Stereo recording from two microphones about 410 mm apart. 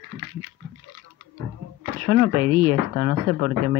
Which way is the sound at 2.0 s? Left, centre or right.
Right.